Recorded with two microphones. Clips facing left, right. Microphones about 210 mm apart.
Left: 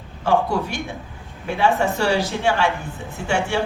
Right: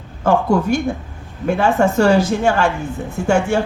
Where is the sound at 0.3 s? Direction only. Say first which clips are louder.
Right 5 dB; 45° right (ahead or behind).